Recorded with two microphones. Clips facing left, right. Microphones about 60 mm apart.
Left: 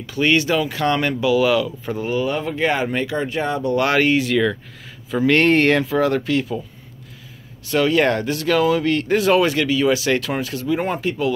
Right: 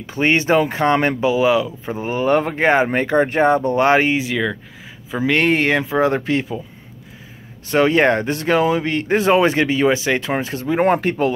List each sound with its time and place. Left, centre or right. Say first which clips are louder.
0.0 s speech: even; right
2.1 s speech: right 7 dB; right; by 5.9 s centre
5.9 s speech: right 1 dB; right
7.7 s speech: right 2 dB; right